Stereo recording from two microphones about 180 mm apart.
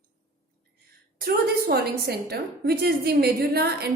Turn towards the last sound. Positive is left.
turn(degrees=-60)  # may be behind; listen again after turning